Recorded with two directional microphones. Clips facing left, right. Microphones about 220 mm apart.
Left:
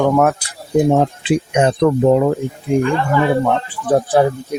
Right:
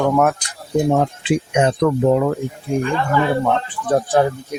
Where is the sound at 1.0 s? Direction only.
35° left (ahead or behind).